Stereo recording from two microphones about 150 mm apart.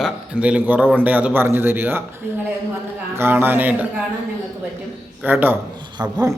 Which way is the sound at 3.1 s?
15° right (ahead or behind).